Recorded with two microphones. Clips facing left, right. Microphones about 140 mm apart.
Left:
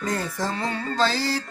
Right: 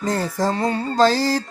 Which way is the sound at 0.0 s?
35° right (ahead or behind).